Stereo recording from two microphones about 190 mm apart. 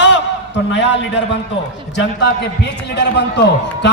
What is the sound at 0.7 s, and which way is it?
Speech, 65° left (ahead or behind).